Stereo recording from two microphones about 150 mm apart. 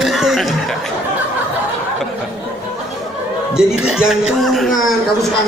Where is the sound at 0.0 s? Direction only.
Centre (ahead or behind).